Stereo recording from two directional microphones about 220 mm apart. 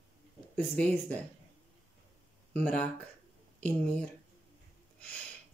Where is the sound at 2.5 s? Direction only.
5° left (ahead or behind).